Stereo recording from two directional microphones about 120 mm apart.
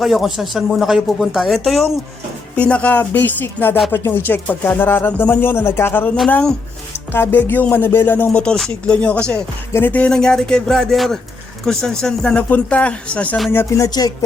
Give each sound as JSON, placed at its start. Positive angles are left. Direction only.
{"t": 0.0, "sound": "speech", "side_deg": 0}
{"t": 2.6, "sound": "music", "side_deg": 10}
{"t": 6.3, "sound": "speech", "side_deg": 5}
{"t": 6.9, "sound": "music", "side_deg": 20}
{"t": 9.7, "sound": "speech", "side_deg": 15}
{"t": 11.6, "sound": "music", "side_deg": 5}
{"t": 13.5, "sound": "music", "side_deg": 25}